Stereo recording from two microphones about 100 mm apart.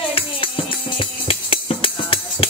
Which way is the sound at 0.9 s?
65° left (ahead or behind).